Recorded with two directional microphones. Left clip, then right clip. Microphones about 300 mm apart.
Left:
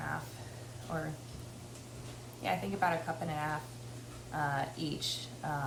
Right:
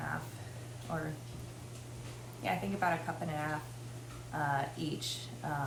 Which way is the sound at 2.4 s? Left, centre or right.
Centre.